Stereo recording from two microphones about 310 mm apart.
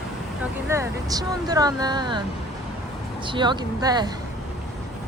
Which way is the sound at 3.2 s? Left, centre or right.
Centre.